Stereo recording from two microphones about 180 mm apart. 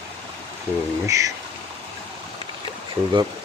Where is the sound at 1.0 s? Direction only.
20° right (ahead or behind).